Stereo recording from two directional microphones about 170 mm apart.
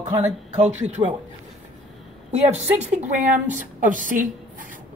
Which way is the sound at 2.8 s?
45° right (ahead or behind).